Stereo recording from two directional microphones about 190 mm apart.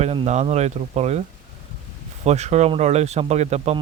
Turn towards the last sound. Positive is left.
turn(degrees=-35)  # may be behind; listen again after turning